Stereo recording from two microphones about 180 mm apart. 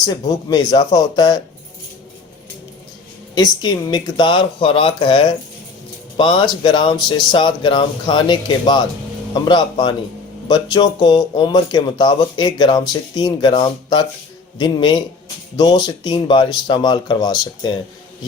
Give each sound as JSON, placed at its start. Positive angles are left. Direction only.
{"t": 0.0, "sound": "speech", "side_deg": 20}
{"t": 3.3, "sound": "speech", "side_deg": 25}